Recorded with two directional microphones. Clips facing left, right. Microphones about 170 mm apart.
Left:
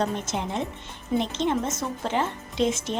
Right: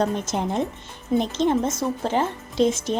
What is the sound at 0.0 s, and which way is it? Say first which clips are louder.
A woman's voice: right 4 dB; 45° right (ahead or behind).